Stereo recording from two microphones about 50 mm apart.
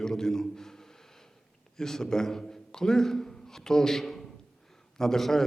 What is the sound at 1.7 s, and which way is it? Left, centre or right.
A man's voice, centre.